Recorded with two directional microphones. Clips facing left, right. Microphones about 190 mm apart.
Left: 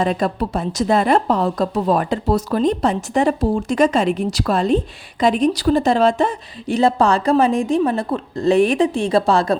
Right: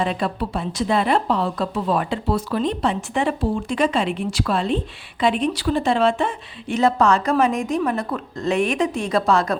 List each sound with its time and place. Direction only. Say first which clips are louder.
0.0 s a woman's voice: left 4 dB; 45° left (ahead or behind)